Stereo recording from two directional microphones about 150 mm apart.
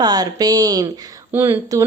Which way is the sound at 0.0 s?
25° right (ahead or behind).